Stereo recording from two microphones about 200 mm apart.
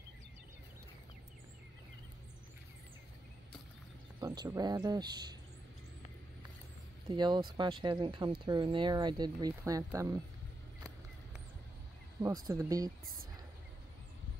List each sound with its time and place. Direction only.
4.2 s speech: 20° right (ahead or behind)
7.1 s speech: 20° right (ahead or behind)
12.4 s speech: 15° right (ahead or behind)